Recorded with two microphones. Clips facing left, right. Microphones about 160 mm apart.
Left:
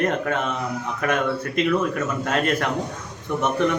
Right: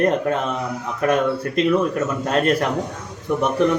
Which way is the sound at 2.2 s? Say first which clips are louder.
Right 4 dB; 35° right (ahead or behind).